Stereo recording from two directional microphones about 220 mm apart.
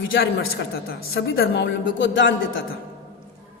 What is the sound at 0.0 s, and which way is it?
Speech, 60° left (ahead or behind).